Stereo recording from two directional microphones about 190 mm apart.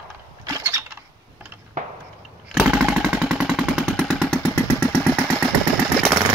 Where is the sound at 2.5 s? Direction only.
5° right (ahead or behind).